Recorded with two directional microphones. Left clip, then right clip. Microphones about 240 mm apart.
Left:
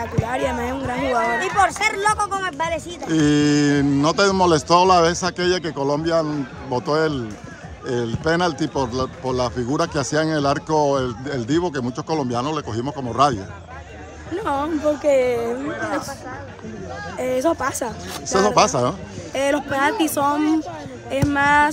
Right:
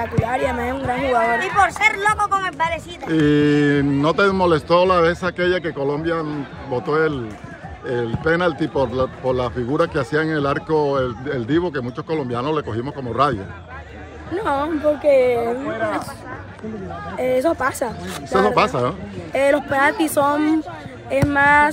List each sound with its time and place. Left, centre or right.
0.0 s speech: centre
1.4 s speech: left
3.1 s speech: centre
17.2 s speech: centre